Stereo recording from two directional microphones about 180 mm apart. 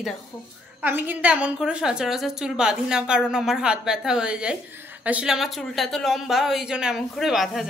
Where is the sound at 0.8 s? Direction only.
10° right (ahead or behind).